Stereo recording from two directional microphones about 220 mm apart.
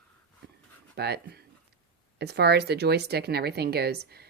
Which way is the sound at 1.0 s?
45° right (ahead or behind).